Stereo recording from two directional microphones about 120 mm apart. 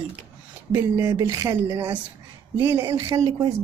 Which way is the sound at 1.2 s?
30° right (ahead or behind).